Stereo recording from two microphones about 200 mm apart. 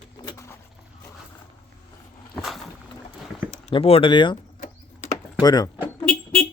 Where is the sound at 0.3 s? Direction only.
15° left (ahead or behind).